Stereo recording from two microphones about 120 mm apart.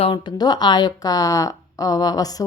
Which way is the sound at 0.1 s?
35° left (ahead or behind).